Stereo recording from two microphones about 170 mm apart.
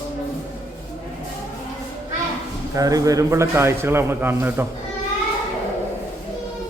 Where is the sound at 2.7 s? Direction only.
20° right (ahead or behind).